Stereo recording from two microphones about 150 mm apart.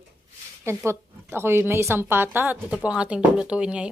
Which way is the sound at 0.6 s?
15° right (ahead or behind).